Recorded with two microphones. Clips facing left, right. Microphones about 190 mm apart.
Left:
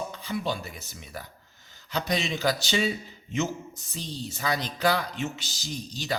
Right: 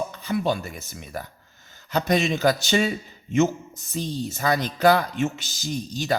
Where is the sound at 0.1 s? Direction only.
50° right (ahead or behind).